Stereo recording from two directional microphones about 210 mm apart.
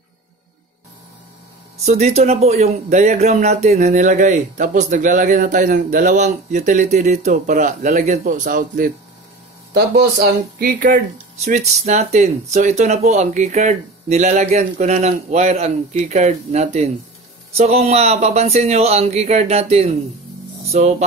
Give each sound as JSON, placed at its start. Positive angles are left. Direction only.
{"t": 1.9, "sound": "speech", "side_deg": -30}